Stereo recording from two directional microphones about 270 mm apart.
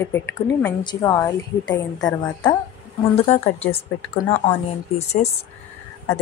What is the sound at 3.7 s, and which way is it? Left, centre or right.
A woman's voice, left.